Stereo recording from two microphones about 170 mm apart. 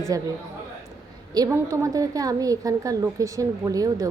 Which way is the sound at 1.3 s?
20° right (ahead or behind).